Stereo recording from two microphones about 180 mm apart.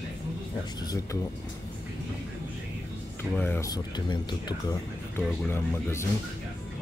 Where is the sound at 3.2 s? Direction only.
10° left (ahead or behind).